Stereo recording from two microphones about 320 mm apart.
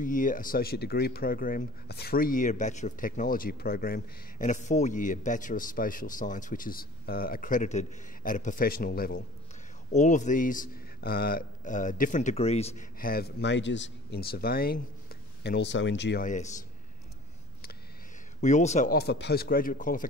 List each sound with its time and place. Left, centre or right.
0.0 s speech: left
18.4 s speech: left